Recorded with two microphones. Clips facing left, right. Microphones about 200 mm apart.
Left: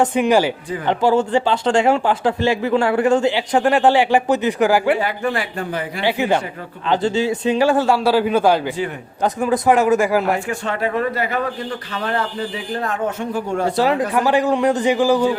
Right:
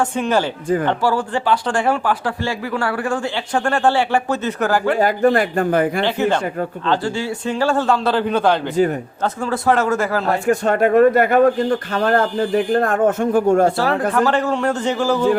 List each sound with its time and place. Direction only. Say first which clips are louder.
0.0 s speech: left 3 dB; 15° left (ahead or behind)
4.9 s speech: right 6 dB; 45° right (ahead or behind)
6.0 s speech: right 1 dB; 10° left (ahead or behind)
8.7 s speech: right 8 dB; 40° right (ahead or behind)
9.2 s speech: left 3 dB; 15° left (ahead or behind)
10.4 s speech: right 7 dB; 40° right (ahead or behind)
13.7 s speech: even; 15° left (ahead or behind)